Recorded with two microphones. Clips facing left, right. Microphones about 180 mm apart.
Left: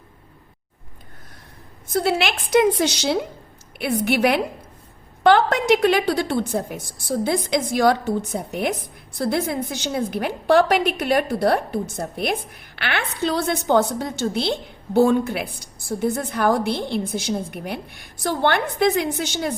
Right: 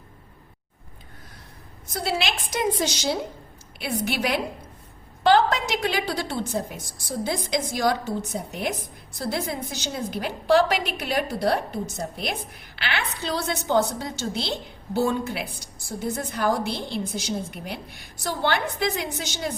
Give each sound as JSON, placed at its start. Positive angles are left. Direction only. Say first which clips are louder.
{"t": 2.0, "sound": "a woman's voice", "louder": "left 2 dB", "side_deg": 60}